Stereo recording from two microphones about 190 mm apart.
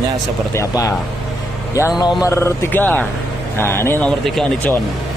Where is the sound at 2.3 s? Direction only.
15° left (ahead or behind).